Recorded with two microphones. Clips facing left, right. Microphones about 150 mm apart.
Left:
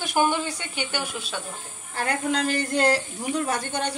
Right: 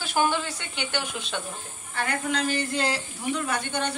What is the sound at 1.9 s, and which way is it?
Speech, 40° left (ahead or behind).